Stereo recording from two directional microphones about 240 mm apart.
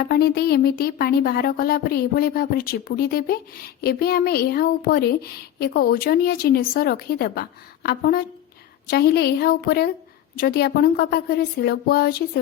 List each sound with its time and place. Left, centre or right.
0.1 s speech: left